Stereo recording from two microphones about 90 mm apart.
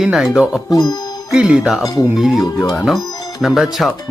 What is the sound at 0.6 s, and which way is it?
Speech, 45° left (ahead or behind).